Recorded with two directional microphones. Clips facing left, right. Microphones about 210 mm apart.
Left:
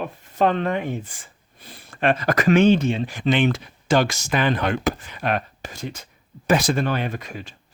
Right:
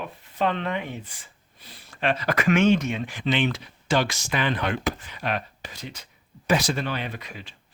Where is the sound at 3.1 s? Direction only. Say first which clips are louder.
Left 4 dB; 50° left (ahead or behind).